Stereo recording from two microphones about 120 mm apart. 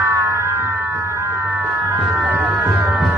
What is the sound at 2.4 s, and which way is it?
Music, 10° right (ahead or behind).